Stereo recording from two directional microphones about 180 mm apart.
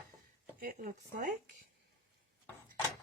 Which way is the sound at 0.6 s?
50° right (ahead or behind).